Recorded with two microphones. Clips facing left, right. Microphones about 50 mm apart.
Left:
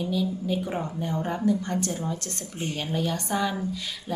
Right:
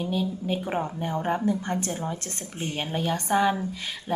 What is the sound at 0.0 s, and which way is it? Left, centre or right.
A woman's voice, right.